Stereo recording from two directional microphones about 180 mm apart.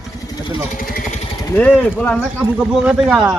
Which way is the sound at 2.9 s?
5° right (ahead or behind).